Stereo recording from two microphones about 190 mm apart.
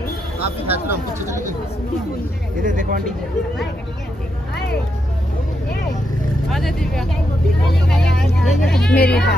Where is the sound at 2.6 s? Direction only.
45° right (ahead or behind).